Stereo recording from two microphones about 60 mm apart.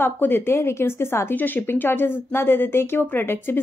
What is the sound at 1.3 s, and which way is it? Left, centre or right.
Speech, left.